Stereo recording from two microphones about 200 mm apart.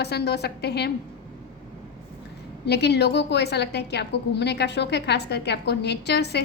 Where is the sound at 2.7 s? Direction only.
55° left (ahead or behind).